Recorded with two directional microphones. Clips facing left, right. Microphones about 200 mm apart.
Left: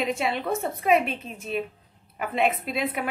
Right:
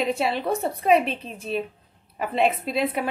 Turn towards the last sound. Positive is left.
turn(degrees=-30)  # may be behind; listen again after turning